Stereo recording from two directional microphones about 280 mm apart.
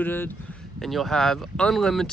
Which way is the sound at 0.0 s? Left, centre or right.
Centre.